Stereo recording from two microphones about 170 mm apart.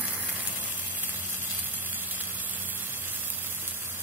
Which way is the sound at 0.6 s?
10° right (ahead or behind).